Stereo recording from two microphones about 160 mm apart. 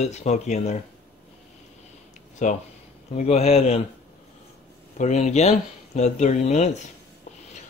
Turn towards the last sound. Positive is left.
turn(degrees=45)  # may be behind; listen again after turning